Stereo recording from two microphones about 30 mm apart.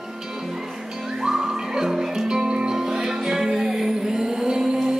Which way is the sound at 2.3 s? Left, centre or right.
Right.